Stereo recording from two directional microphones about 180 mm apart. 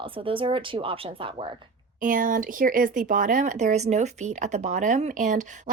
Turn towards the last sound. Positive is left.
turn(degrees=-45)  # may be behind; listen again after turning